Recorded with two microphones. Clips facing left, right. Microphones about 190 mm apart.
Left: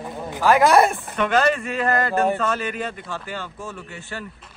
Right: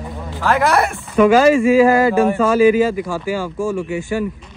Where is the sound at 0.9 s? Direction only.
5° right (ahead or behind).